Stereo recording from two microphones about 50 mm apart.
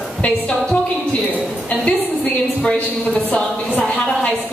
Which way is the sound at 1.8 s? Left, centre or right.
Left.